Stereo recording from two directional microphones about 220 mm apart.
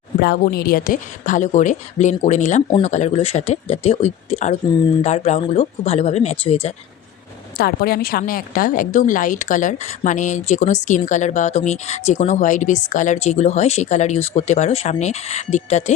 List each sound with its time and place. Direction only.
0.2 s a woman's voice: 45° left (ahead or behind); by 6.7 s 25° left (ahead or behind)
7.6 s a woman's voice: 45° left (ahead or behind)